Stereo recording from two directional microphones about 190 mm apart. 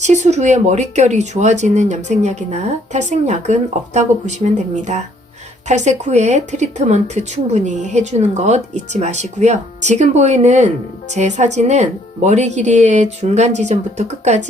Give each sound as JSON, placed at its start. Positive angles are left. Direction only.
{"t": 0.0, "sound": "speech", "side_deg": -40}